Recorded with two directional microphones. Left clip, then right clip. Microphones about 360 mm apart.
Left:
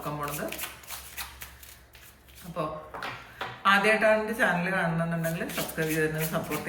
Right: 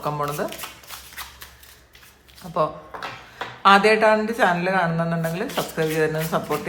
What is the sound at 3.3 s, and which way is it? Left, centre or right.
Speech, centre.